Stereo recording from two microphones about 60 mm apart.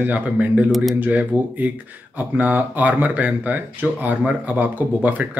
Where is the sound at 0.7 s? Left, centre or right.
Centre.